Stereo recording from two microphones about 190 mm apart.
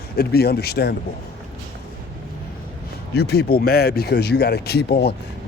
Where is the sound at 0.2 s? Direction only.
55° left (ahead or behind).